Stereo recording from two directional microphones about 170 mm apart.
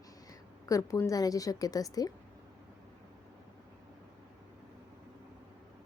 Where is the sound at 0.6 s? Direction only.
20° left (ahead or behind).